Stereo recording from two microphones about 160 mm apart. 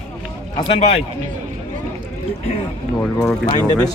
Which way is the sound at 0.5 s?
35° left (ahead or behind).